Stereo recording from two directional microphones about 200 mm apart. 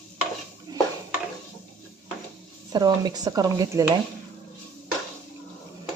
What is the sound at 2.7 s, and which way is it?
A woman's voice, 20° right (ahead or behind).